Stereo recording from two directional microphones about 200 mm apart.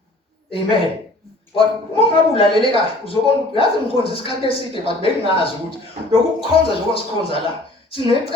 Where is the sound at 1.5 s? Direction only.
25° left (ahead or behind).